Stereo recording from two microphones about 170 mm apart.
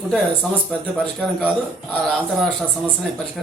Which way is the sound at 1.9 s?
5° left (ahead or behind).